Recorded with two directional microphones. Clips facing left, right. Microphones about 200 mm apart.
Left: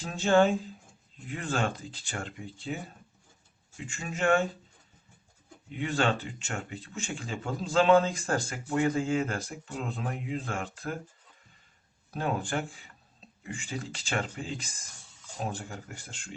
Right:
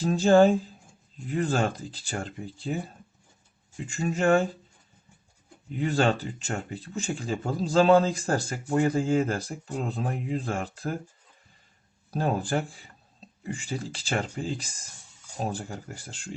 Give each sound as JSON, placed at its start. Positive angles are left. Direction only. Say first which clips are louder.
{"t": 0.0, "sound": "speech", "louder": "right 5 dB", "side_deg": -40}
{"t": 3.8, "sound": "speech", "louder": "right 6 dB", "side_deg": -40}
{"t": 5.7, "sound": "speech", "louder": "right 4 dB", "side_deg": -40}
{"t": 12.1, "sound": "speech", "louder": "right 4 dB", "side_deg": -35}